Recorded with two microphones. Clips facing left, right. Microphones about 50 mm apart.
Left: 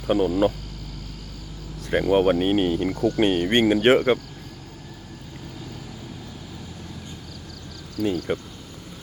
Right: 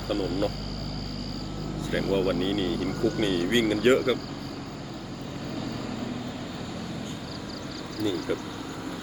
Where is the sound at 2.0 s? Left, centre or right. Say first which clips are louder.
Left 7 dB; left.